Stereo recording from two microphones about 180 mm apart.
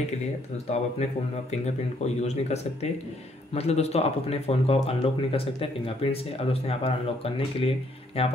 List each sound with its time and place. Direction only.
1.5 s speech: 40° left (ahead or behind)